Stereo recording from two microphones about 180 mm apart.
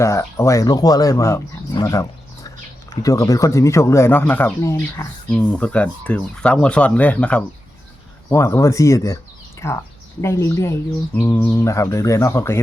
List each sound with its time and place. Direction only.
0.0 s speech: 15° left (ahead or behind)